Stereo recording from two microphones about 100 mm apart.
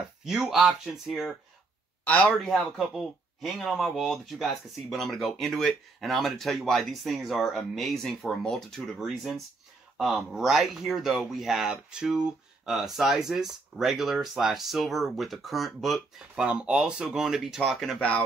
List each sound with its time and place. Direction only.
0.2 s speech: 5° right (ahead or behind)
2.0 s speech: 15° left (ahead or behind)
2.4 s speech: centre (ahead or behind)